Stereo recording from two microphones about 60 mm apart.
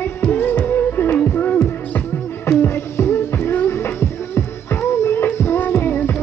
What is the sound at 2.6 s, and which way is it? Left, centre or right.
Music, left.